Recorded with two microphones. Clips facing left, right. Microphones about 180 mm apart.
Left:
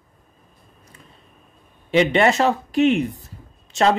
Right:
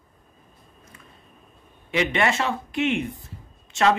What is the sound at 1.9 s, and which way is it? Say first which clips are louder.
Speech: left 6 dB; 30° left (ahead or behind).